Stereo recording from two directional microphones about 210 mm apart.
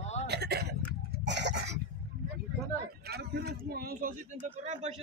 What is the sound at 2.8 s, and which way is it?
Speech, 50° right (ahead or behind).